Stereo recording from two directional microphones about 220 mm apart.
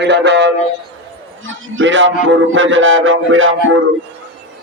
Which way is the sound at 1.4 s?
65° right (ahead or behind).